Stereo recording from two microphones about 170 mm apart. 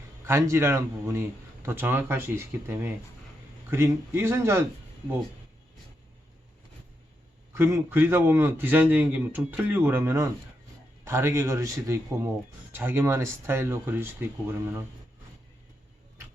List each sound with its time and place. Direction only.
0.3 s a man's voice: 15° right (ahead or behind)
7.5 s a man's voice: 15° right (ahead or behind)